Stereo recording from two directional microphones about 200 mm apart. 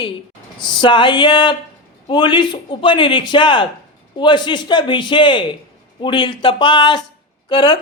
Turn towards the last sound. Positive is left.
turn(degrees=25)  # may be behind; listen again after turning